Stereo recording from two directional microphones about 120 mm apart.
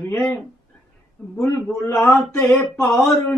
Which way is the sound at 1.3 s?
25° left (ahead or behind).